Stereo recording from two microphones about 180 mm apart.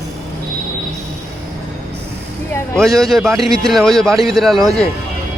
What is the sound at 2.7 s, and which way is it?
A man's voice, centre (ahead or behind).